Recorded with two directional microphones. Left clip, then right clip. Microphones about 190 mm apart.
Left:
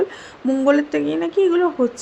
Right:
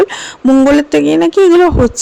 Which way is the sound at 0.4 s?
55° right (ahead or behind).